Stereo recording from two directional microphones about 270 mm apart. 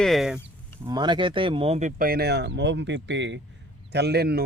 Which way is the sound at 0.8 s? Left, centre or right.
Centre.